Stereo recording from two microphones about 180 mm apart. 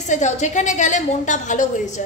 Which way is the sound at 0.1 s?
40° left (ahead or behind).